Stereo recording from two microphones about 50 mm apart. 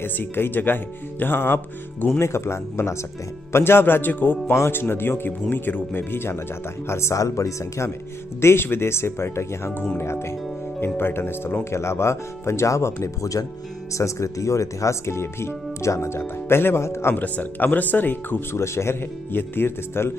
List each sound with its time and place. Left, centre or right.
0.0 s a man's voice: left
2.1 s speech: left
3.5 s a man's voice: left
6.9 s speech: left
8.4 s speech: left
11.0 s a man's voice: left
11.7 s speech: left
17.1 s speech: left
18.6 s speech: left
19.3 s a man's voice: left